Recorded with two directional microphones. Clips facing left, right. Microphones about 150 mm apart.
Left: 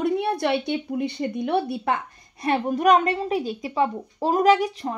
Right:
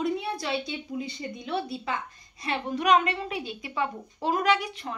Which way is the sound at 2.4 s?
45° left (ahead or behind).